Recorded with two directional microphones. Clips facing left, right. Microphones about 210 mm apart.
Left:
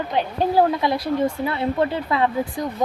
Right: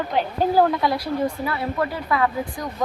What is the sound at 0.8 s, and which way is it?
Speech, 25° left (ahead or behind).